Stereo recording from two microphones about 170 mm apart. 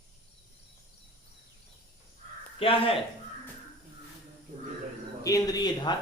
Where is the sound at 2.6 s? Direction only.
35° left (ahead or behind).